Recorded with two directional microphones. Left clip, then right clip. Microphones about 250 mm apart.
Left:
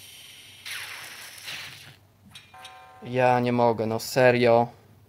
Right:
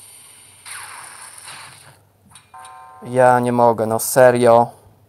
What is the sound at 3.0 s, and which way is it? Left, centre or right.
Speech, centre.